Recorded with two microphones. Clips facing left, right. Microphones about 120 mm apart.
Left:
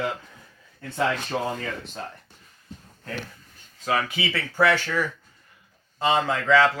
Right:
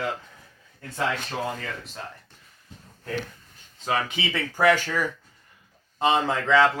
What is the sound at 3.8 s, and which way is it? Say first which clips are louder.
Speech: left 1 dB; 25° right (ahead or behind).